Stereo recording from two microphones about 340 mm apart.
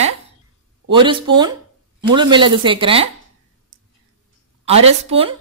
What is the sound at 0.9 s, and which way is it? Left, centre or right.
A woman's voice, centre.